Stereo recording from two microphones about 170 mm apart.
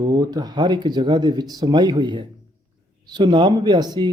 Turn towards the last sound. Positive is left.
turn(degrees=-25)  # may be behind; listen again after turning